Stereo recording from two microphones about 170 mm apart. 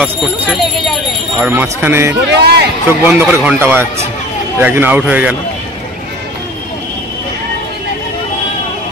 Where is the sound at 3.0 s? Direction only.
10° right (ahead or behind).